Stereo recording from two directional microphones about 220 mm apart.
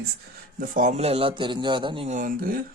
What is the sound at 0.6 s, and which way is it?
Speech, 35° right (ahead or behind).